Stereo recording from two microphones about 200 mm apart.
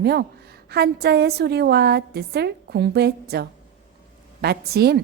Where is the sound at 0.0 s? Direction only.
55° right (ahead or behind).